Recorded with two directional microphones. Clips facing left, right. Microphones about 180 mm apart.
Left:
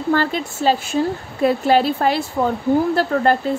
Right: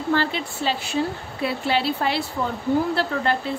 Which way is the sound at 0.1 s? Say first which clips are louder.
Left 4 dB; 45° left (ahead or behind).